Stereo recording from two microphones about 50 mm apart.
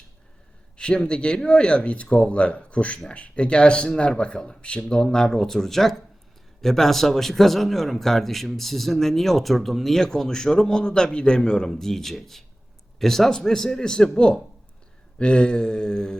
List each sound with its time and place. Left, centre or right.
0.8 s a man's voice: centre